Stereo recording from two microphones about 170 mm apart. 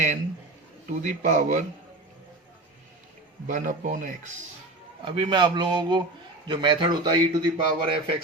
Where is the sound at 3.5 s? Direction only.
50° right (ahead or behind).